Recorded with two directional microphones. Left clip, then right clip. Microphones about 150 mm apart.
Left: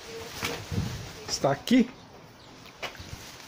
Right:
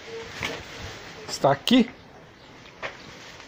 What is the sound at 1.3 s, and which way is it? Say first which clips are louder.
Speech: right 4 dB; 10° left (ahead or behind).